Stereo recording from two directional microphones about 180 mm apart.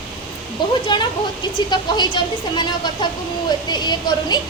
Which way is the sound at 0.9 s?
25° left (ahead or behind).